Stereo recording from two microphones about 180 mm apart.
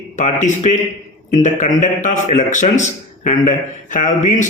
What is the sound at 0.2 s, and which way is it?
A man's voice, 40° left (ahead or behind).